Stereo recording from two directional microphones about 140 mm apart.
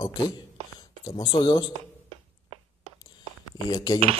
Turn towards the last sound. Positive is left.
turn(degrees=30)  # may be behind; listen again after turning